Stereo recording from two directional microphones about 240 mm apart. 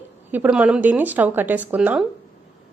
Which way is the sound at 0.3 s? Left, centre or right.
Centre.